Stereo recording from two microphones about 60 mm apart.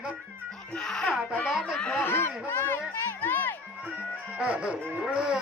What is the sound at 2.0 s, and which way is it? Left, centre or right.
Speech, left.